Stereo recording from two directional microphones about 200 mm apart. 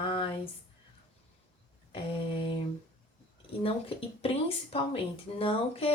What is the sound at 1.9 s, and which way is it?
Speech, 25° left (ahead or behind).